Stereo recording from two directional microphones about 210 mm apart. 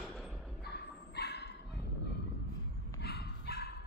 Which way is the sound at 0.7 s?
50° left (ahead or behind).